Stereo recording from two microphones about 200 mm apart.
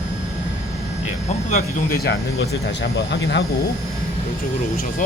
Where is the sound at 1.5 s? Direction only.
40° left (ahead or behind).